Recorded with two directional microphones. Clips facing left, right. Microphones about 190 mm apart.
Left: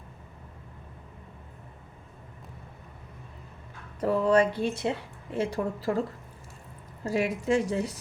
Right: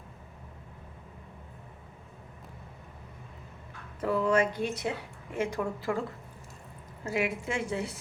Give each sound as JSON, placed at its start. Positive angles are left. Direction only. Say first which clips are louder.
{"t": 4.0, "sound": "speech", "louder": "left 4 dB", "side_deg": 35}
{"t": 7.1, "sound": "speech", "louder": "left 5 dB", "side_deg": 35}